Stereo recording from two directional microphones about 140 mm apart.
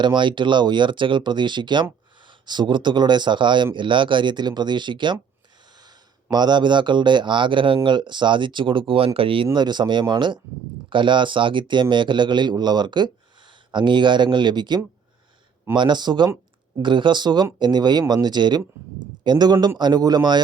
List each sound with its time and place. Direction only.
0.0 s a man's voice: 35° right (ahead or behind)
6.3 s a man's voice: 30° right (ahead or behind)